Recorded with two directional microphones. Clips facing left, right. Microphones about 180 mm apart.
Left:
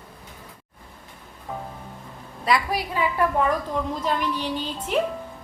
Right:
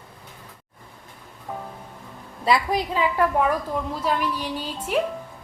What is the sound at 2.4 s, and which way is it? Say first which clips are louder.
Speech: right 2 dB; 25° right (ahead or behind).